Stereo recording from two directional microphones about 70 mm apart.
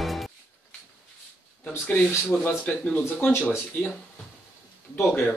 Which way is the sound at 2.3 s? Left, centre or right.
Left.